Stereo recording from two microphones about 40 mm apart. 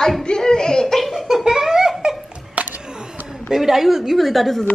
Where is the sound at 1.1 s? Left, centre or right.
Centre.